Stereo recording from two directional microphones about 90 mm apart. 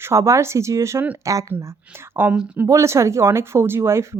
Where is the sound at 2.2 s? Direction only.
25° right (ahead or behind).